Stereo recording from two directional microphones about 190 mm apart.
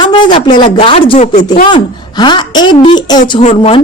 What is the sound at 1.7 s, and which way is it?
Speech, 25° left (ahead or behind).